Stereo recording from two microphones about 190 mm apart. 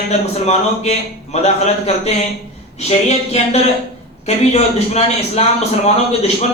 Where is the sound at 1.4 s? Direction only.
35° left (ahead or behind).